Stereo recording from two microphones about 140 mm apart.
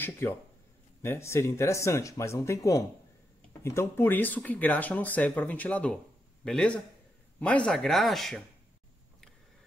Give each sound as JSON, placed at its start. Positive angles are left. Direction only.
{"t": 0.0, "sound": "speech", "side_deg": 15}